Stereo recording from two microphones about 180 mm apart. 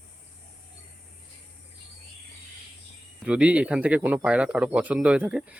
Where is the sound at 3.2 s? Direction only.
5° right (ahead or behind).